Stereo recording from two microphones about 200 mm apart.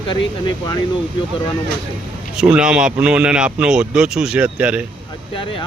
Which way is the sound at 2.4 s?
5° right (ahead or behind).